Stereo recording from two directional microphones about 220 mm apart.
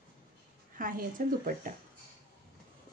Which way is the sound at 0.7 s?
40° right (ahead or behind).